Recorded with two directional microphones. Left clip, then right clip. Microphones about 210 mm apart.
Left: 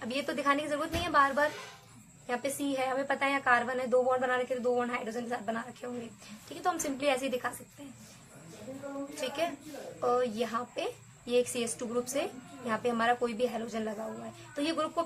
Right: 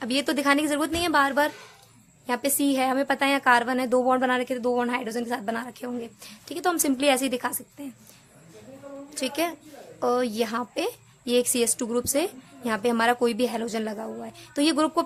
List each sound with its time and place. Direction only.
0.0 s a woman's voice: 50° right (ahead or behind)
9.2 s a woman's voice: 50° right (ahead or behind)